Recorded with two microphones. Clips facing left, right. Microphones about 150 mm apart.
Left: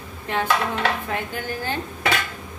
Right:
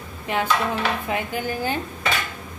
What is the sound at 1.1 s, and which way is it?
Speech, 15° right (ahead or behind).